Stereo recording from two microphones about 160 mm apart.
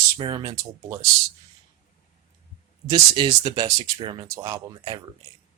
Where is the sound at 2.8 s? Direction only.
25° right (ahead or behind).